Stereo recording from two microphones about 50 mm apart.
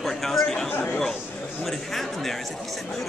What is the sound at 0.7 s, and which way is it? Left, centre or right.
Chatter, left.